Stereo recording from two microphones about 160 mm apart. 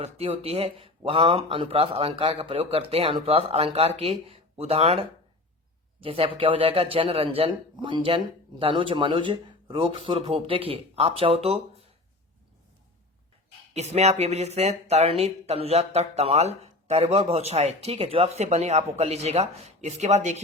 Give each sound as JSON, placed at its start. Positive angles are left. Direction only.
{"t": 0.0, "sound": "speech", "side_deg": -40}
{"t": 13.7, "sound": "speech", "side_deg": -40}